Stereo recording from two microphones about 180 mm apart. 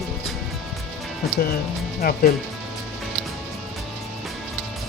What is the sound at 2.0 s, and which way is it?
Speech, 55° left (ahead or behind).